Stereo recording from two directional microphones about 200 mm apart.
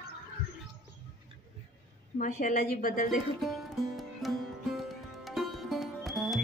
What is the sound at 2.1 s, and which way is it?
Speech, 40° left (ahead or behind).